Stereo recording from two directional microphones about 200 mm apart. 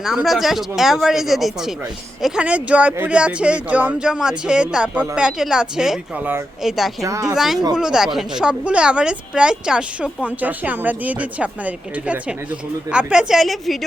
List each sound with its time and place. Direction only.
0.0 s speech: centre (ahead or behind)
7.0 s speech: 15° right (ahead or behind)
7.3 s speech: centre (ahead or behind)